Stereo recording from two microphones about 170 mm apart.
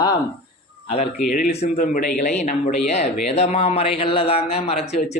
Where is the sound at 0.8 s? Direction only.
40° left (ahead or behind).